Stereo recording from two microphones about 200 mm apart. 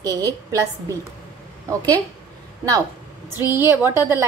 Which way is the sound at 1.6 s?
20° right (ahead or behind).